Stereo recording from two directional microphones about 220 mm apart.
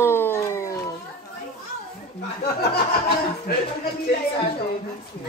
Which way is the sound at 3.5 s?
45° left (ahead or behind).